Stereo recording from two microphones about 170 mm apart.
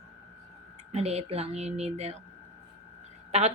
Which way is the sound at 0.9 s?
40° right (ahead or behind).